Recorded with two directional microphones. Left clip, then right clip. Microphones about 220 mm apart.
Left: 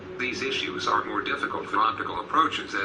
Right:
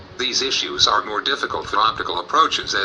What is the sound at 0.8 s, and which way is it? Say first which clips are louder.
Speech: right 8 dB; 30° right (ahead or behind).